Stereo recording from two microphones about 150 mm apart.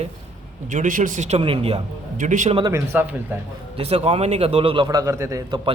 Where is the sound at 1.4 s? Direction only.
40° right (ahead or behind).